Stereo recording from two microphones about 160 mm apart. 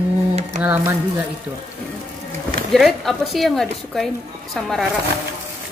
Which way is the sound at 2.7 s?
Centre (ahead or behind).